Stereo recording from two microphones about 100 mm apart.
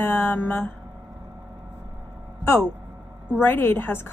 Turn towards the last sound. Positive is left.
turn(degrees=20)  # may be behind; listen again after turning